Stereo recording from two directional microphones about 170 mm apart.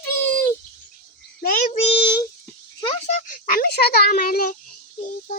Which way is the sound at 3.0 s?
50° left (ahead or behind).